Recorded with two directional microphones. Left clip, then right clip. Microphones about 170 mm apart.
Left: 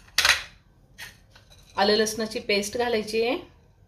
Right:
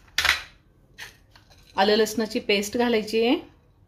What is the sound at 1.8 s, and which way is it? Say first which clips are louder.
Speech: right 1 dB; 45° right (ahead or behind).